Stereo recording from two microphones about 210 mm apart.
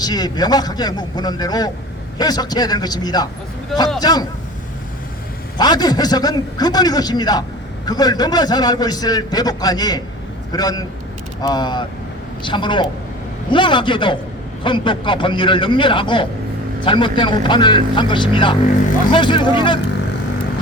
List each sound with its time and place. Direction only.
0.0 s a man's voice: 20° left (ahead or behind)
5.5 s a man's voice: 20° left (ahead or behind)